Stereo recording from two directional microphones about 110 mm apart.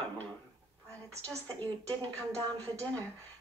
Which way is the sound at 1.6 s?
15° left (ahead or behind).